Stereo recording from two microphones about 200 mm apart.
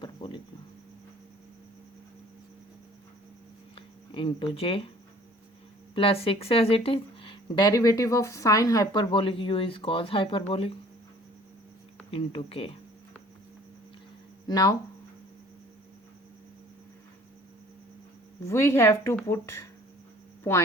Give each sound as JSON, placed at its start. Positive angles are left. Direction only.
{"t": 0.0, "sound": "insect", "side_deg": 25}
{"t": 3.8, "sound": "speech", "side_deg": 25}
{"t": 5.9, "sound": "speech", "side_deg": 30}
{"t": 12.1, "sound": "speech", "side_deg": 25}
{"t": 14.4, "sound": "speech", "side_deg": 20}
{"t": 18.4, "sound": "a woman's voice", "side_deg": 15}